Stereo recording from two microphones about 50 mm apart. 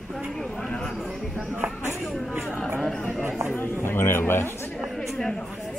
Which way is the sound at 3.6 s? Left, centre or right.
Left.